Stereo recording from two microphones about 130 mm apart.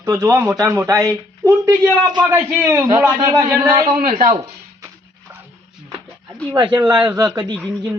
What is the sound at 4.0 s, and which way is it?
Speech, 80° right.